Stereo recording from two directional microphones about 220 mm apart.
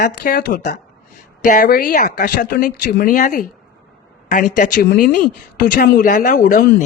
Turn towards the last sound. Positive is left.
turn(degrees=35)  # may be behind; listen again after turning